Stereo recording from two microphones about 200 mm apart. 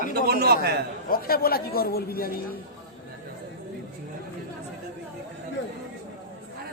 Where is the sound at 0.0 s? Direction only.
50° right (ahead or behind).